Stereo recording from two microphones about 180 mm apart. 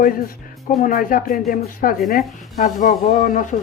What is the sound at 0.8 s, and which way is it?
Speech, 50° left (ahead or behind).